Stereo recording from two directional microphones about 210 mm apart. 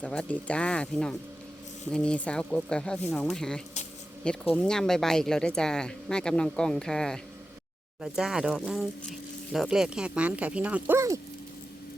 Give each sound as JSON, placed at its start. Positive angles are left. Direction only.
{"t": 0.0, "sound": "speech", "side_deg": 5}